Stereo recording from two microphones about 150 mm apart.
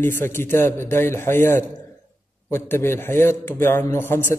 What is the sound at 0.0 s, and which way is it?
A man's voice, 15° left (ahead or behind).